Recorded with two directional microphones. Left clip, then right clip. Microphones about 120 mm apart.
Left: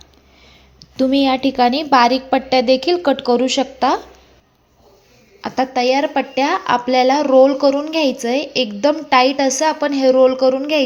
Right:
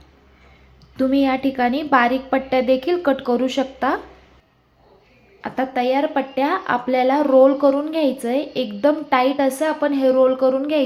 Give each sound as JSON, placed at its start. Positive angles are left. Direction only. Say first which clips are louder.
{"t": 0.9, "sound": "a woman's voice", "louder": "left 3 dB", "side_deg": 25}
{"t": 5.4, "sound": "a woman's voice", "louder": "left 4 dB", "side_deg": 35}
{"t": 10.1, "sound": "a woman's voice", "louder": "left 4 dB", "side_deg": 25}